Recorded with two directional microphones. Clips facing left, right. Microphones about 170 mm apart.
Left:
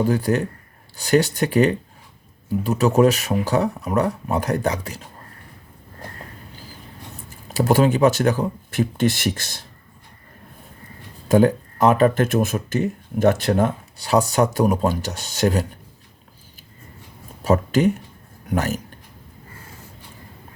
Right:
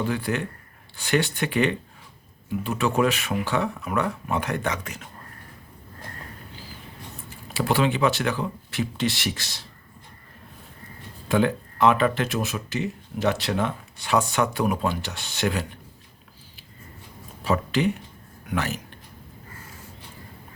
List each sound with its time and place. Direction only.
0.0 s speech: 40° left (ahead or behind)
7.3 s speech: 45° left (ahead or behind)
11.3 s speech: 40° left (ahead or behind)
17.4 s speech: 45° left (ahead or behind)